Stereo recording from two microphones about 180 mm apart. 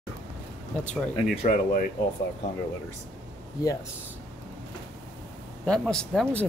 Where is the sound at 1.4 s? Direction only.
45° left (ahead or behind).